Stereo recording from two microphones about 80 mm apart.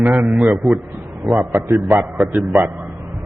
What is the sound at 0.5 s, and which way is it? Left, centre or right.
Speech, centre.